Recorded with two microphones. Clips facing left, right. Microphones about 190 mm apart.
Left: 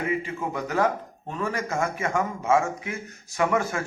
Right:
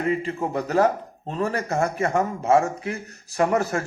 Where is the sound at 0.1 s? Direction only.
35° right (ahead or behind).